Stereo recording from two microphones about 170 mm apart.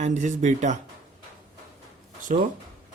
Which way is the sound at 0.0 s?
45° right (ahead or behind).